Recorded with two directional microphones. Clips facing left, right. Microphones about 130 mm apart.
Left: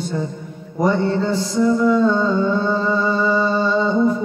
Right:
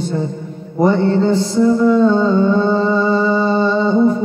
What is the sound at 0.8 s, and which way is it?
Mantra, 30° right (ahead or behind).